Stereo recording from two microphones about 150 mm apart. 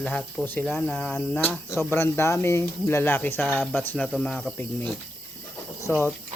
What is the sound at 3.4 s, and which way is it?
Speech, 5° right (ahead or behind).